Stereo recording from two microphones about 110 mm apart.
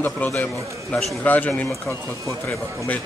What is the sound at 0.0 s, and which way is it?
Speech, 15° left (ahead or behind).